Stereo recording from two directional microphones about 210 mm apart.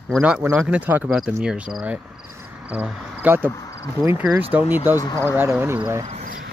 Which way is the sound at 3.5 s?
15° left (ahead or behind).